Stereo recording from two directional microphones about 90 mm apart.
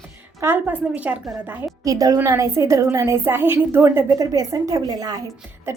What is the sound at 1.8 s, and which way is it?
A woman's voice, 40° right (ahead or behind).